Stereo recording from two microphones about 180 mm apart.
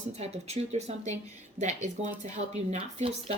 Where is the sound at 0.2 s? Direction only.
35° right (ahead or behind).